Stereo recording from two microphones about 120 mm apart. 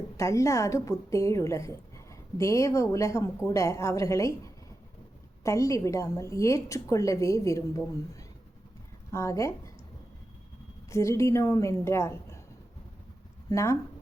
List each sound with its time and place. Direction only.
0.2 s a woman's voice: 25° left (ahead or behind)
10.8 s a woman's voice: 25° left (ahead or behind)
13.5 s a woman's voice: 25° left (ahead or behind)